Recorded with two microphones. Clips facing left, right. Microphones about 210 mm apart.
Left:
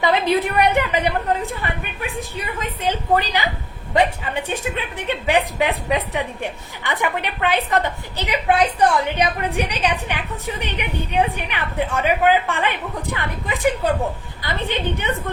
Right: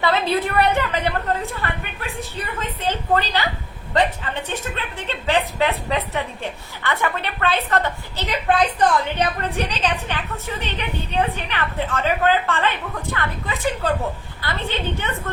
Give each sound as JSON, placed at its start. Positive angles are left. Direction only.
{"t": 0.0, "sound": "a woman's voice", "side_deg": 15}